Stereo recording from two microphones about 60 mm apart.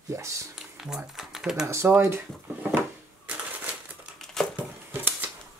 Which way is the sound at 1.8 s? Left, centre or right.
Right.